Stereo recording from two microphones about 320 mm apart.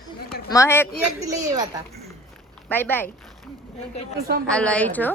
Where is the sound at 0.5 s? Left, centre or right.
Centre.